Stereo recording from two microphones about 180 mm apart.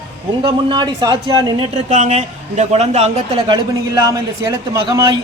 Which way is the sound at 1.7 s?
40° right (ahead or behind).